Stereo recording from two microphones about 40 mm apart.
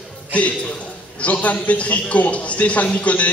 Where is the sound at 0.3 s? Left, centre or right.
Left.